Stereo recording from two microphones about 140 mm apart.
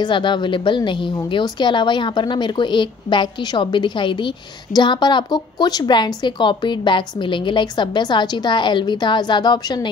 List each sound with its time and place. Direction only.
0.0 s a woman's voice: 35° left (ahead or behind)